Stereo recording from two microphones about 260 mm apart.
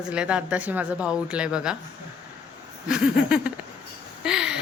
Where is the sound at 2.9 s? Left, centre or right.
Centre.